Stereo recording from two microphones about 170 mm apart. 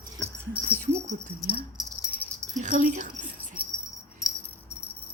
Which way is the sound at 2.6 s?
45° right (ahead or behind).